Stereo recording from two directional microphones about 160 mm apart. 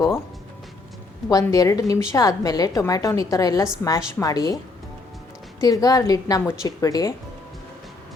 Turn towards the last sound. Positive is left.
turn(degrees=20)  # may be behind; listen again after turning